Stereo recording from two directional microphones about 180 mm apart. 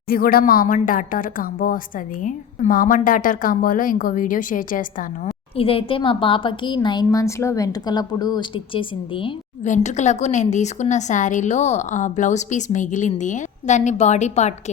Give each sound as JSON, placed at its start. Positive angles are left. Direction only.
{"t": 0.1, "sound": "a woman's voice", "side_deg": 55}
{"t": 5.5, "sound": "a woman's voice", "side_deg": 30}
{"t": 9.6, "sound": "a woman's voice", "side_deg": 40}